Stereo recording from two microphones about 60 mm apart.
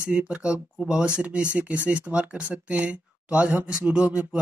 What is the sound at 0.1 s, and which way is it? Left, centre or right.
Speech, centre.